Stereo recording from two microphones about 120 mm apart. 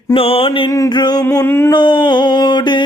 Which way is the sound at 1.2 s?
20° left (ahead or behind).